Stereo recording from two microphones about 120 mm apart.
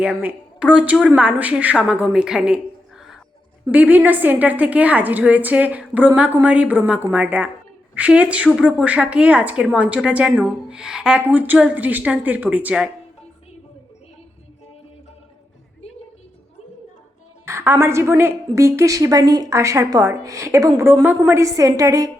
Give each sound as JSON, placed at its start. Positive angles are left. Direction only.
{"t": 0.0, "sound": "a woman's voice", "side_deg": -10}
{"t": 3.7, "sound": "a woman's voice", "side_deg": -15}
{"t": 17.4, "sound": "a woman's voice", "side_deg": -20}